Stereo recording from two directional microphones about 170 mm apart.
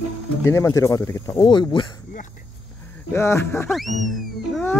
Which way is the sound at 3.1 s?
15° left (ahead or behind).